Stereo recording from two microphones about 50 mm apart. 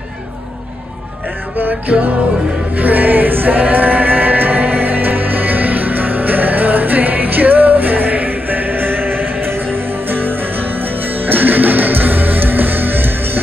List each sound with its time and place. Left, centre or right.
1.6 s music: right